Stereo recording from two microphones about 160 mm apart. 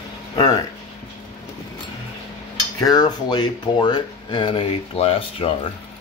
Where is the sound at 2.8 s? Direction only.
25° left (ahead or behind).